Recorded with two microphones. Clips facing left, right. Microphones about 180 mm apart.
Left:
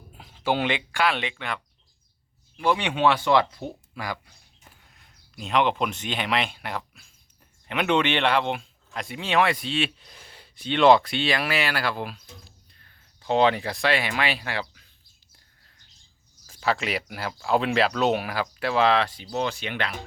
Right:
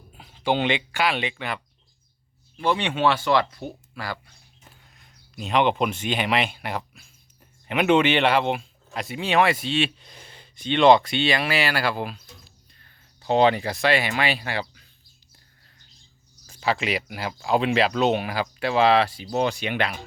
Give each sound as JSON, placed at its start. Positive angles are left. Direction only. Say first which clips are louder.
{"t": 0.2, "sound": "speech", "louder": "right 2 dB", "side_deg": 5}
{"t": 2.6, "sound": "speech", "louder": "even", "side_deg": 10}
{"t": 5.4, "sound": "speech", "louder": "right 2 dB", "side_deg": 0}
{"t": 16.5, "sound": "speech", "louder": "right 1 dB", "side_deg": 0}